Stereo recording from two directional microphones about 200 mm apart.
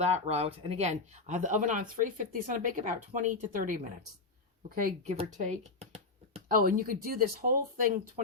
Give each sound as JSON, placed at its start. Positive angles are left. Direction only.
{"t": 0.0, "sound": "speech", "side_deg": -35}
{"t": 5.1, "sound": "a sound", "side_deg": -30}
{"t": 6.5, "sound": "speech", "side_deg": -45}